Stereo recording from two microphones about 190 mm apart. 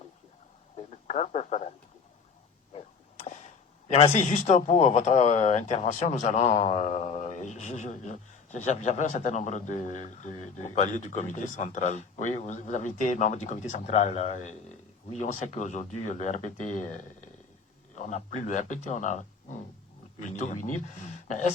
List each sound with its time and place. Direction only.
1.0 s a man's voice: 35° left (ahead or behind)
3.4 s a man's voice: 35° left (ahead or behind)